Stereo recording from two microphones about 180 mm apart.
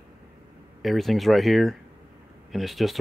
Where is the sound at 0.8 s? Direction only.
Centre (ahead or behind).